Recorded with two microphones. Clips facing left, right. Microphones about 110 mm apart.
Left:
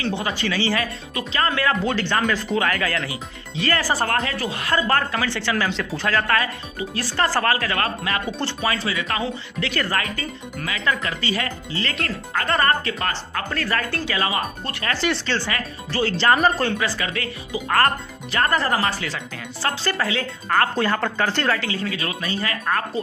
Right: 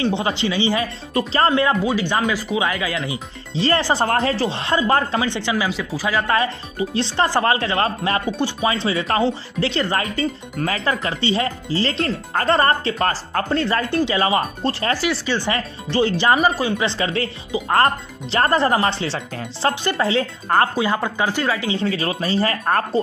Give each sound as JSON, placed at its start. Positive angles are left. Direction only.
{"t": 0.0, "sound": "speech", "side_deg": -20}
{"t": 1.1, "sound": "speech", "side_deg": -35}
{"t": 1.5, "sound": "speech", "side_deg": -20}
{"t": 3.1, "sound": "speech", "side_deg": -30}
{"t": 6.3, "sound": "speech", "side_deg": -25}
{"t": 8.4, "sound": "speech", "side_deg": -15}
{"t": 15.0, "sound": "speech", "side_deg": -10}
{"t": 16.3, "sound": "speech", "side_deg": -5}
{"t": 16.7, "sound": "speech", "side_deg": -25}
{"t": 19.7, "sound": "speech", "side_deg": -20}
{"t": 20.1, "sound": "speech", "side_deg": -30}
{"t": 20.7, "sound": "speech", "side_deg": -10}
{"t": 21.5, "sound": "speech", "side_deg": -20}
{"t": 21.8, "sound": "speech", "side_deg": -30}